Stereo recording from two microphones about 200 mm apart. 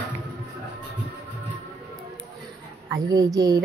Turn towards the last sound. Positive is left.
turn(degrees=-20)  # may be behind; listen again after turning